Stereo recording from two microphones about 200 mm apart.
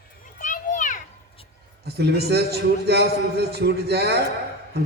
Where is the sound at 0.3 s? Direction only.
40° left (ahead or behind).